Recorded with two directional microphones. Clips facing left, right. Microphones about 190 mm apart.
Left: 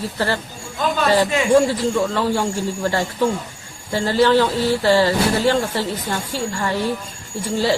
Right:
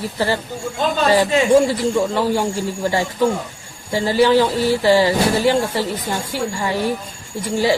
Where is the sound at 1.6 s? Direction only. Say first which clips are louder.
Right 1 dB; 15° right (ahead or behind).